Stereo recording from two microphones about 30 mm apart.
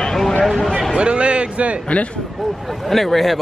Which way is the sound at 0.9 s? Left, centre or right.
Right.